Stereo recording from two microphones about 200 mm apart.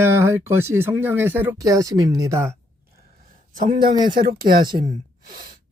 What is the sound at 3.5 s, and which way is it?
A man's voice, 40° right (ahead or behind).